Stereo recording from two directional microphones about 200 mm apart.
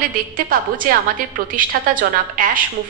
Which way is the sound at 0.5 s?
45° right (ahead or behind).